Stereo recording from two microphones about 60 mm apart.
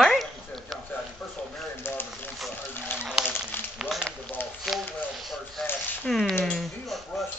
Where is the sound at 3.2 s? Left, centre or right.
Left.